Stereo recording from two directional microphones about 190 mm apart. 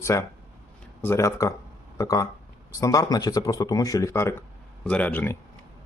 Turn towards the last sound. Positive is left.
turn(degrees=10)  # may be behind; listen again after turning